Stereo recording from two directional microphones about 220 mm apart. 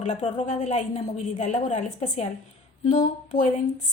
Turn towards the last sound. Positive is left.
turn(degrees=35)  # may be behind; listen again after turning